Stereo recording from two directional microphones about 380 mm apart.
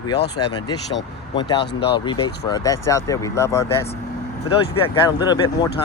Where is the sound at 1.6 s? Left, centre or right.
Left.